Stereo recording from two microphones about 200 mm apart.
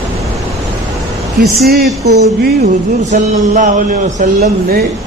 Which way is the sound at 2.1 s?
55° right (ahead or behind).